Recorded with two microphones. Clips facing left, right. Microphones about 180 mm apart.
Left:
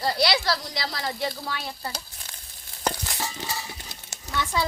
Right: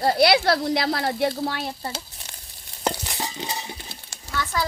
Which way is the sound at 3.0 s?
20° right (ahead or behind).